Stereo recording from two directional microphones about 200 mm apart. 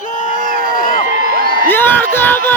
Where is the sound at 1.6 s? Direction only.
10° left (ahead or behind).